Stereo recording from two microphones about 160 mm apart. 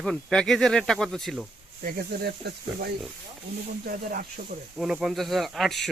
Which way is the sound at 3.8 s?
65° right (ahead or behind).